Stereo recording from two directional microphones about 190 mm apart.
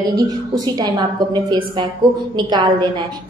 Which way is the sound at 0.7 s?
20° right (ahead or behind).